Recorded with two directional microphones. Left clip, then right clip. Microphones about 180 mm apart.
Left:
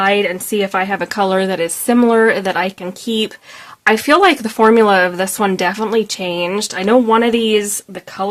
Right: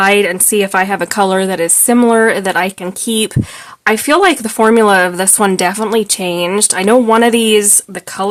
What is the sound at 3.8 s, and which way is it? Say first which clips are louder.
Speech: right 1 dB; 20° right (ahead or behind).